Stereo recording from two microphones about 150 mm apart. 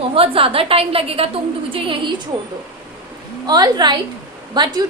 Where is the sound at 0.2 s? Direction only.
40° right (ahead or behind).